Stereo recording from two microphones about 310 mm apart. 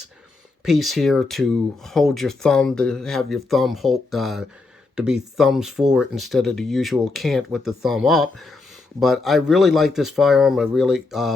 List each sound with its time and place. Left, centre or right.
0.6 s speech: centre